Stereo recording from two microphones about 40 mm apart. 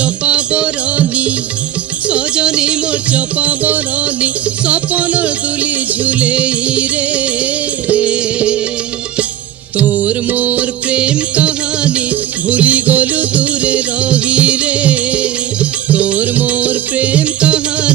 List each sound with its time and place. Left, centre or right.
0.0 s music: right
9.8 s music: right